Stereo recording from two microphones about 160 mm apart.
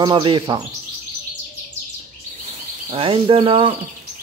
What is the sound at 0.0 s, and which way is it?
Speech, 30° right (ahead or behind).